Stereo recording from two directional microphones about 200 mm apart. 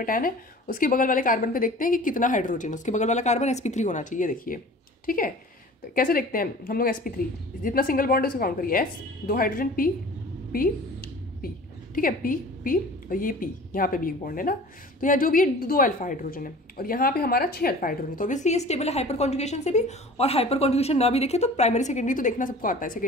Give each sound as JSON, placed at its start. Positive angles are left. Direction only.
{"t": 0.0, "sound": "a woman's voice", "side_deg": 45}